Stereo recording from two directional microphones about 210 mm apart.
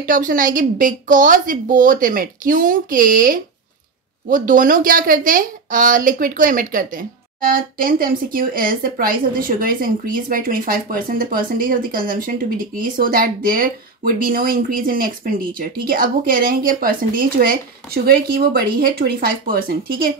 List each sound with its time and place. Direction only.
0.0 s a woman's voice: 40° right (ahead or behind)